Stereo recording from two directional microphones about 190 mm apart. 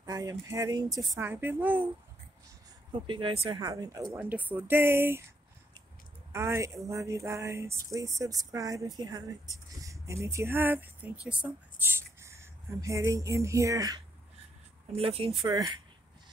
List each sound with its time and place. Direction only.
0.0 s a woman's voice: 15° right (ahead or behind)
2.9 s a woman's voice: 25° right (ahead or behind)
6.3 s a woman's voice: 15° right (ahead or behind)
15.0 s speech: 30° right (ahead or behind)
15.4 s speech: 20° right (ahead or behind)